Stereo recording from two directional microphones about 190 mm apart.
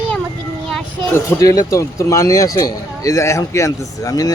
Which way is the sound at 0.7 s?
5° left (ahead or behind).